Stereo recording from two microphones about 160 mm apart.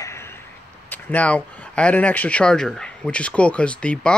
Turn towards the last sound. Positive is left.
turn(degrees=5)  # may be behind; listen again after turning